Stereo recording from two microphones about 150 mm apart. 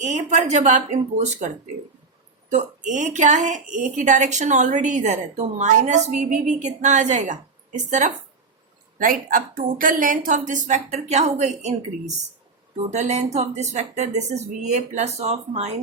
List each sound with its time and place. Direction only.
0.0 s a woman's voice: 50° right (ahead or behind)
2.5 s a woman's voice: 55° right (ahead or behind)
9.0 s a woman's voice: 65° right (ahead or behind); by 15.7 s 45° right (ahead or behind)